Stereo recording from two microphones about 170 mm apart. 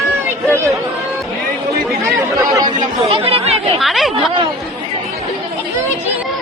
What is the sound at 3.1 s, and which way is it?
Speech, 35° right (ahead or behind).